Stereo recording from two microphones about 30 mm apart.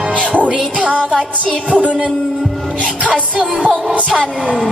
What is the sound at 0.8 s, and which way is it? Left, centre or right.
Speech, left.